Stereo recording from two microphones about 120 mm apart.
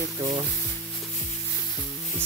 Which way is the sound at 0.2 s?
35° right (ahead or behind).